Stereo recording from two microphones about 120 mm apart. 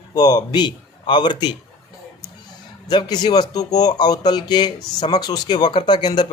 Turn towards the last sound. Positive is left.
turn(degrees=40)  # may be behind; listen again after turning